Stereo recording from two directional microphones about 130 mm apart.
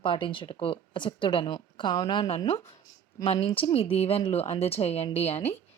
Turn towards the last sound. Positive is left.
turn(degrees=55)  # may be behind; listen again after turning